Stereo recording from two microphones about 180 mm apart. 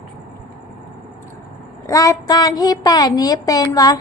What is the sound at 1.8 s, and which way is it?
Child singing, 20° left (ahead or behind).